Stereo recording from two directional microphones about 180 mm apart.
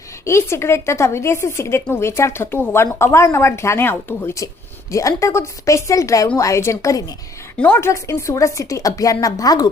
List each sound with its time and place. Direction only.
0.3 s a woman's voice: 15° left (ahead or behind)